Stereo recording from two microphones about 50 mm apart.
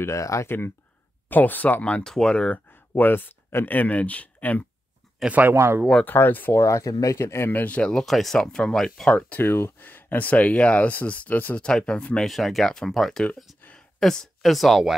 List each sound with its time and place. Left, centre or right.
0.0 s speech: left
1.3 s speech: left
2.0 s speech: centre
2.7 s a sound: left
3.6 s speech: left
5.5 s speech: right
6.0 s speech: left
6.5 s speech: left
7.5 s speech: left
7.8 s speech: centre
9.4 s speech: left
11.6 s speech: centre
12.2 s speech: centre